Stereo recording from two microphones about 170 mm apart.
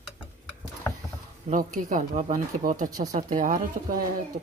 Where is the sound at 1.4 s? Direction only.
50° right (ahead or behind).